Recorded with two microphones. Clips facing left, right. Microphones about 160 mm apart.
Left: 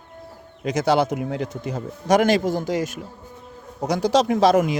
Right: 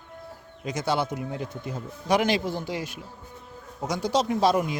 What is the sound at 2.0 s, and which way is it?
Speech, 45° left (ahead or behind).